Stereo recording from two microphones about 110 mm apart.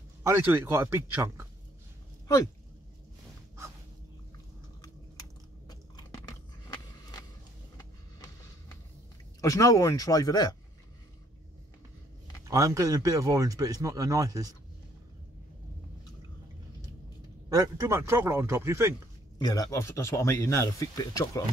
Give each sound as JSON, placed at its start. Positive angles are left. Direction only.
{"t": 0.2, "sound": "speech", "side_deg": -25}
{"t": 5.7, "sound": "biting", "side_deg": 35}
{"t": 7.7, "sound": "a sound", "side_deg": 30}
{"t": 9.4, "sound": "speech", "side_deg": 30}
{"t": 12.4, "sound": "speech", "side_deg": -30}
{"t": 17.5, "sound": "speech", "side_deg": -30}
{"t": 19.3, "sound": "speech", "side_deg": 35}